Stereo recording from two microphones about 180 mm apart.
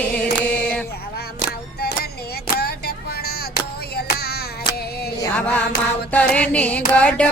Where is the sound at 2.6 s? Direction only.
60° left (ahead or behind).